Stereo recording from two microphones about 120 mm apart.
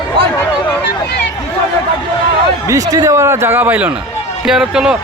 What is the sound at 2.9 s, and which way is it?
A man's voice, 30° right (ahead or behind).